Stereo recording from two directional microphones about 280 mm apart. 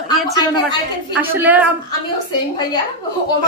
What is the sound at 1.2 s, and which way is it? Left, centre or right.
Speech, centre.